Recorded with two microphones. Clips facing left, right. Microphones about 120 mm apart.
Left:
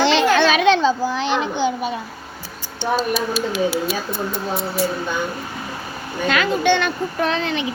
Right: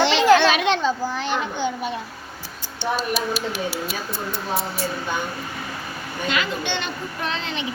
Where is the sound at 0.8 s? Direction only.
90° left.